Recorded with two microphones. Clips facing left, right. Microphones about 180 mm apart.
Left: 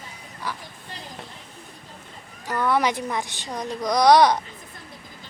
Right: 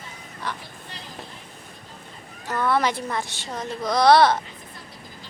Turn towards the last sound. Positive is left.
turn(degrees=15)  # may be behind; listen again after turning